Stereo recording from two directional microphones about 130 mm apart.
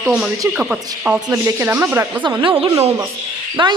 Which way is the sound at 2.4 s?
40° right (ahead or behind).